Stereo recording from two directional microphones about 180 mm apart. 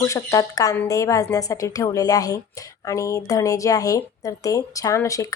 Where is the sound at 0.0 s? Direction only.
20° left (ahead or behind).